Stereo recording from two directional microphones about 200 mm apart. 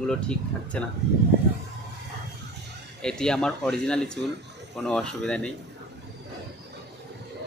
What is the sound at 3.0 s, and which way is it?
Speech, 5° left (ahead or behind).